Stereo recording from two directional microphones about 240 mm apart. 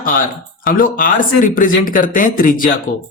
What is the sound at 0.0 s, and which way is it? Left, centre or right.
Speech, left.